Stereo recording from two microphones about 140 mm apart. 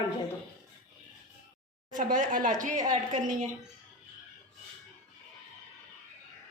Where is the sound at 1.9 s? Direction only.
70° right (ahead or behind).